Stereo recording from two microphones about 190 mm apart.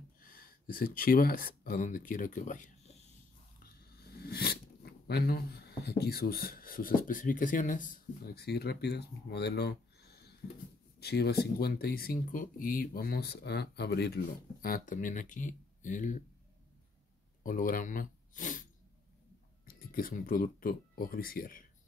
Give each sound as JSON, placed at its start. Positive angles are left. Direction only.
{"t": 0.2, "sound": "speech", "side_deg": 50}
{"t": 3.5, "sound": "speech", "side_deg": 55}
{"t": 17.4, "sound": "speech", "side_deg": 45}